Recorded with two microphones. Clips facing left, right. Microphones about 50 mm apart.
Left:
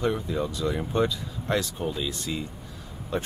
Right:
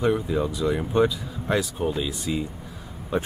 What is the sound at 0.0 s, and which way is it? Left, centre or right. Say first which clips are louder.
Speech: right 4 dB; centre.